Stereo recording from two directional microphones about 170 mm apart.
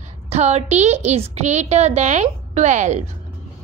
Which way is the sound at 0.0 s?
40° right (ahead or behind).